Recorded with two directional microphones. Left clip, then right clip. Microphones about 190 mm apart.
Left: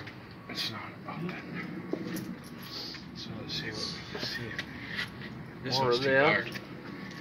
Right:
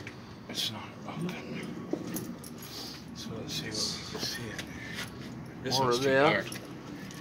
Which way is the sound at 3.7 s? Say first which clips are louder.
Right 3 dB; 15° right (ahead or behind).